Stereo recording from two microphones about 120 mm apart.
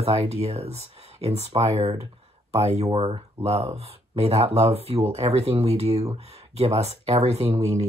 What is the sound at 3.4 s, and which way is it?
Speech, 60° right (ahead or behind).